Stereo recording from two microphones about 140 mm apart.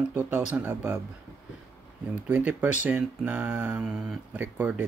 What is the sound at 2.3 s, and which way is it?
Speech, 10° right (ahead or behind).